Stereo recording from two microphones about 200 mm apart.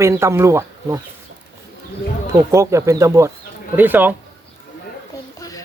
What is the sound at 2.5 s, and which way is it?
Speech, 15° right (ahead or behind).